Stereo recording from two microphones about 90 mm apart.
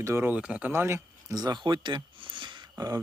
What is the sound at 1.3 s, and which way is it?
Speech, 50° right (ahead or behind).